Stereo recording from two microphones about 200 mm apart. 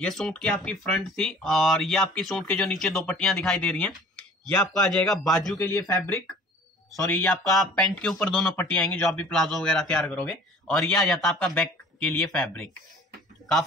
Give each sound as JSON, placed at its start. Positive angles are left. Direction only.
{"t": 0.0, "sound": "speech", "side_deg": 5}
{"t": 5.5, "sound": "a man's voice", "side_deg": 15}
{"t": 7.5, "sound": "speech", "side_deg": 0}